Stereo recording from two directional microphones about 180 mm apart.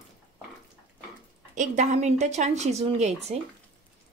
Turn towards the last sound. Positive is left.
turn(degrees=-35)  # may be behind; listen again after turning